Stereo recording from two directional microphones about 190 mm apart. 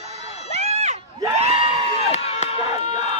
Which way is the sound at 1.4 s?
30° right (ahead or behind).